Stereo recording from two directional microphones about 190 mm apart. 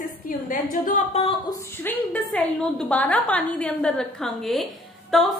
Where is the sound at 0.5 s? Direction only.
45° left (ahead or behind); by 1.5 s 25° left (ahead or behind).